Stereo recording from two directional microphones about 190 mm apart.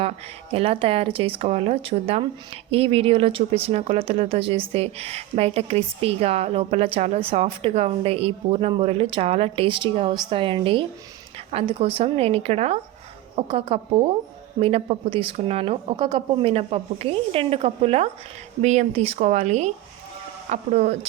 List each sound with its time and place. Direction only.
0.5 s a woman's voice: 30° right (ahead or behind)